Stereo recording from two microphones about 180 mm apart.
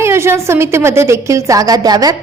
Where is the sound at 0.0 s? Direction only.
15° right (ahead or behind).